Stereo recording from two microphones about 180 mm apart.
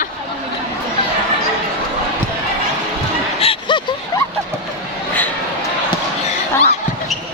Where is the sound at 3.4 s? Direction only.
30° left (ahead or behind).